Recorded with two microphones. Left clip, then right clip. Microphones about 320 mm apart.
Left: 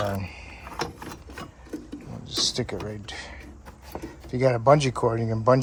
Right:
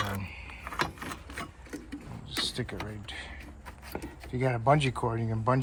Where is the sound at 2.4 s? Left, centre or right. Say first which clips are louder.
Left 7 dB; centre.